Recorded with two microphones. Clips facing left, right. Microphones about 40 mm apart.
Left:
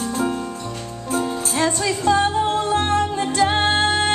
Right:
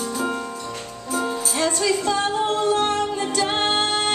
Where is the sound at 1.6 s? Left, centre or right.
Centre.